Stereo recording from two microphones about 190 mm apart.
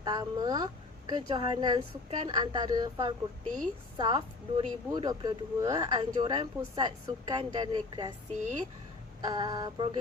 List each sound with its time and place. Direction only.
0.0 s speech: 20° right (ahead or behind)
8.3 s speech: 40° right (ahead or behind)
9.2 s speech: 20° right (ahead or behind)